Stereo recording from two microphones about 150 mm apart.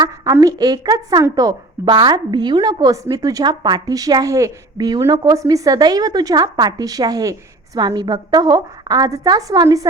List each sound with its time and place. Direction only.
0.0 s a woman's voice: 20° right (ahead or behind)